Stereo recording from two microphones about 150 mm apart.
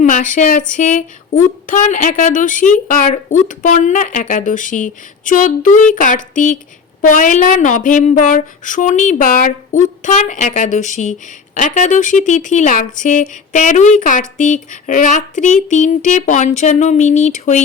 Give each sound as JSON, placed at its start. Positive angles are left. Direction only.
{"t": 0.0, "sound": "speech", "side_deg": 60}